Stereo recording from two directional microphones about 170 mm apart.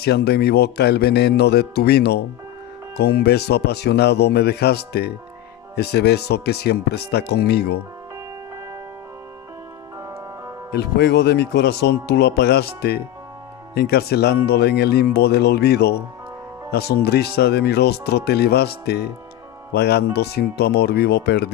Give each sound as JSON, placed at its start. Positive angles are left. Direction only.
{"t": 0.0, "sound": "speech", "side_deg": 70}
{"t": 10.7, "sound": "speech", "side_deg": 80}